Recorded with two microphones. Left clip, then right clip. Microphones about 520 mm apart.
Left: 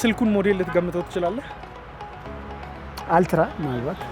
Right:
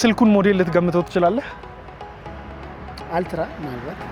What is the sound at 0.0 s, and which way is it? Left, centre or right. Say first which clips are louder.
Speech: right 5 dB; right.